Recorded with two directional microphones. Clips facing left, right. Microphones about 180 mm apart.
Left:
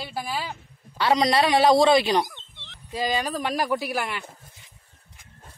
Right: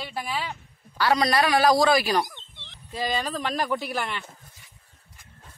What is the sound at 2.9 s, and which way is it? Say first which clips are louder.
Speech: left 2 dB; 10° left (ahead or behind).